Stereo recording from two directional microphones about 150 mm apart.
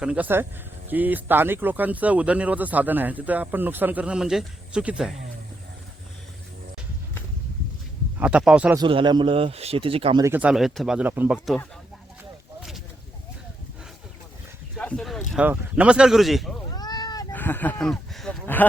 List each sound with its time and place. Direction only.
0.0 s speech: 10° right (ahead or behind)
8.2 s speech: 5° right (ahead or behind)
8.9 s speech: 30° right (ahead or behind)
10.2 s speech: 15° right (ahead or behind)
10.5 s speech: centre (ahead or behind)
14.8 s a sound: 5° left (ahead or behind)
15.3 s speech: 5° right (ahead or behind)
16.7 s a sound: 25° left (ahead or behind)
17.3 s speech: 10° left (ahead or behind)